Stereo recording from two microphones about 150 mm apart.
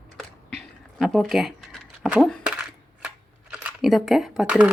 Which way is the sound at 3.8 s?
Centre (ahead or behind).